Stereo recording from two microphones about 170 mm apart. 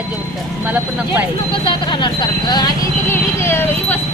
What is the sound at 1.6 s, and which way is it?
Speech, 25° left (ahead or behind).